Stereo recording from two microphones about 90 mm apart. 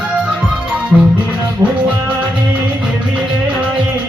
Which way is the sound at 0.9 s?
5° right (ahead or behind).